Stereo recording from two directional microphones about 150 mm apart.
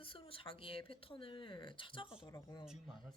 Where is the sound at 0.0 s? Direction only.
35° left (ahead or behind).